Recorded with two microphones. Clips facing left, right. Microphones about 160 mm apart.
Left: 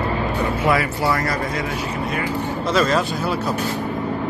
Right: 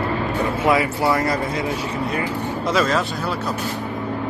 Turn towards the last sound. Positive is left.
turn(degrees=0)  # may be behind; listen again after turning